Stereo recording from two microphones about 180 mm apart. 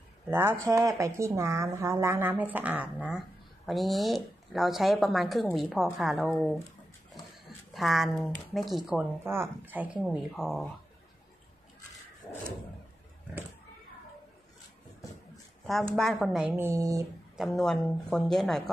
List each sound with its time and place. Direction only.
0.3 s a woman's voice: 10° right (ahead or behind)
7.7 s a woman's voice: centre (ahead or behind)
9.2 s speech: 15° right (ahead or behind)
12.2 s a sound: 15° left (ahead or behind)
16.0 s speech: centre (ahead or behind); by 17.0 s 15° right (ahead or behind)
17.4 s a woman's voice: centre (ahead or behind)